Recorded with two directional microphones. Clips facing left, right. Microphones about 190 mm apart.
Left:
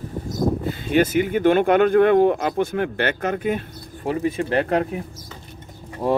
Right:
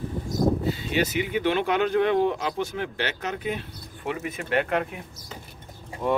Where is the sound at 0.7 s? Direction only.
50° left (ahead or behind).